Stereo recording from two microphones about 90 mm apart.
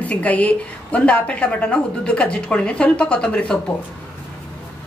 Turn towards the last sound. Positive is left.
turn(degrees=10)  # may be behind; listen again after turning